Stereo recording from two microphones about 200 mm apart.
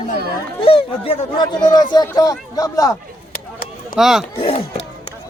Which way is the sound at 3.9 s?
Centre (ahead or behind).